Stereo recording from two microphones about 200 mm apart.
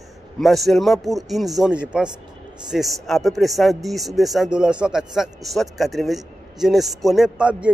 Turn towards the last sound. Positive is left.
turn(degrees=-5)  # may be behind; listen again after turning